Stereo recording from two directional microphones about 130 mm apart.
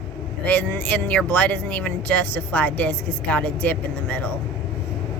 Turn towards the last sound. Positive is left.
turn(degrees=10)  # may be behind; listen again after turning